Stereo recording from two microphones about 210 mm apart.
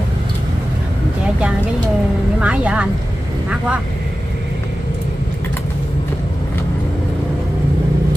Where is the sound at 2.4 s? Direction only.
5° right (ahead or behind).